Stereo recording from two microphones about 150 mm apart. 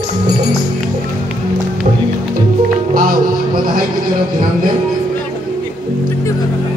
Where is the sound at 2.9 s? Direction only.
75° right (ahead or behind).